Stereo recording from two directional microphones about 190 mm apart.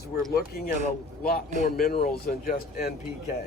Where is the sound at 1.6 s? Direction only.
55° left (ahead or behind).